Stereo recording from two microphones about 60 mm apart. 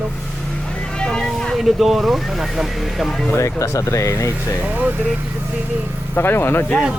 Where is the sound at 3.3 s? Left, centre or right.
Left.